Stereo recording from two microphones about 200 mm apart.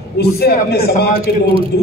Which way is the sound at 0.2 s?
55° left (ahead or behind).